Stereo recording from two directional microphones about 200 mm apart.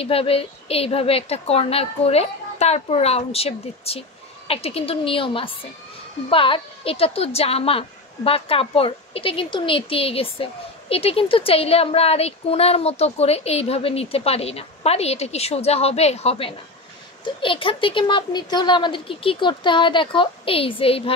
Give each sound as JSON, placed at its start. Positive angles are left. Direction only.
{"t": 0.0, "sound": "a woman's voice", "side_deg": 30}